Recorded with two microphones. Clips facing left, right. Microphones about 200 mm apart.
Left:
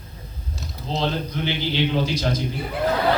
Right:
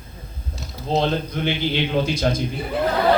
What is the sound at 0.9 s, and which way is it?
A man's voice, 50° right (ahead or behind).